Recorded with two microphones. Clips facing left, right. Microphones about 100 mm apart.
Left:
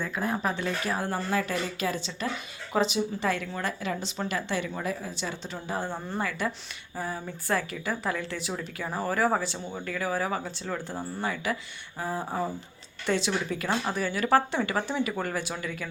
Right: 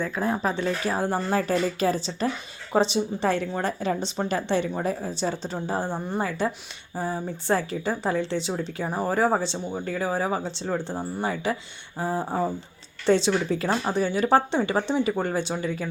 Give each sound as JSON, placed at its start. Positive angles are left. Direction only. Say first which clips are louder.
{"t": 0.0, "sound": "speech", "louder": "right 4 dB", "side_deg": -30}